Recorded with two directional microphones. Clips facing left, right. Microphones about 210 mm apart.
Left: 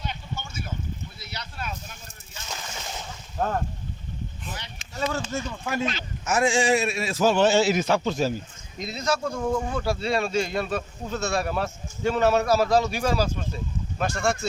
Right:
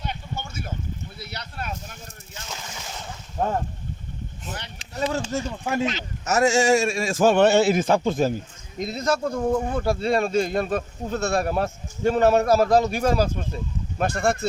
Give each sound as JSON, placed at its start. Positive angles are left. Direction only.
{"t": 0.0, "sound": "a sound", "side_deg": -55}
{"t": 4.8, "sound": "speech", "side_deg": -35}
{"t": 6.2, "sound": "speech", "side_deg": -40}
{"t": 9.4, "sound": "speech", "side_deg": -40}
{"t": 9.7, "sound": "speech", "side_deg": -50}